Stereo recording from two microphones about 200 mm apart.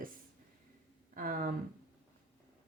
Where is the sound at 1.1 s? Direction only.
45° right (ahead or behind).